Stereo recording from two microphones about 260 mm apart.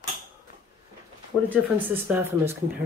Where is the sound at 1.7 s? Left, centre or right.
Centre.